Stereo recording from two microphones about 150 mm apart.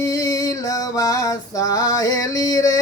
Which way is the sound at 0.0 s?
20° left (ahead or behind).